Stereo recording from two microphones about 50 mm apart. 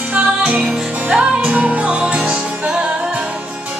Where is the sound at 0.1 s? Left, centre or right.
Right.